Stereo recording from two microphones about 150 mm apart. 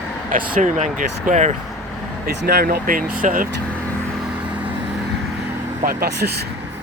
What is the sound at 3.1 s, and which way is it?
Speech, 65° right (ahead or behind).